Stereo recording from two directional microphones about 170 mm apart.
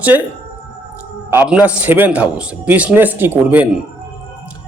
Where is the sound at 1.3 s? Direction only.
10° right (ahead or behind).